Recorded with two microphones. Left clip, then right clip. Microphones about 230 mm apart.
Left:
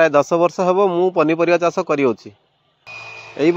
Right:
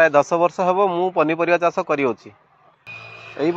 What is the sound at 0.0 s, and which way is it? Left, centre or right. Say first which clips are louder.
Speech: left 1 dB; left.